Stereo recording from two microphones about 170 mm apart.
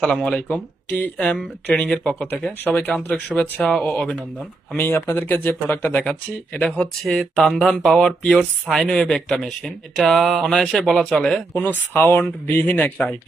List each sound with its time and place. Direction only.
0.0 s speech: 5° left (ahead or behind)